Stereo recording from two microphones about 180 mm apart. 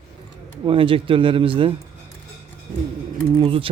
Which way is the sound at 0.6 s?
30° right (ahead or behind).